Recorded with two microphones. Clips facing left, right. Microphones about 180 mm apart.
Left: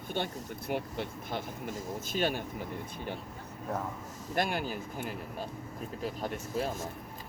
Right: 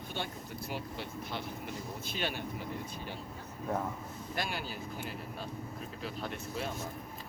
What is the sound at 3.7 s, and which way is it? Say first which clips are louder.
Speech: right 1 dB; centre (ahead or behind).